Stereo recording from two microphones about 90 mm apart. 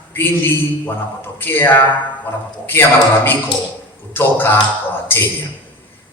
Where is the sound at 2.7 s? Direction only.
25° left (ahead or behind).